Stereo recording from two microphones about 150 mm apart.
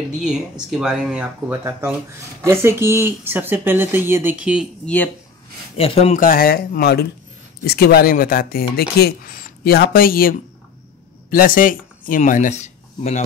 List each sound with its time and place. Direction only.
0.1 s speech: 5° right (ahead or behind)
4.8 s speech: 10° left (ahead or behind)
5.8 s speech: 40° left (ahead or behind)
6.1 s speech: 70° left (ahead or behind); by 13.2 s 50° left (ahead or behind)